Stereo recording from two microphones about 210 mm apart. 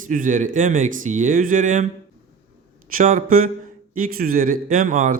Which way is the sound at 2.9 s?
40° right (ahead or behind).